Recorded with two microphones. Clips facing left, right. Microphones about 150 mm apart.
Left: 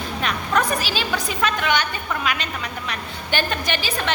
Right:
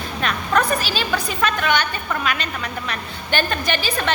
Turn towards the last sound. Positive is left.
turn(degrees=15)  # may be behind; listen again after turning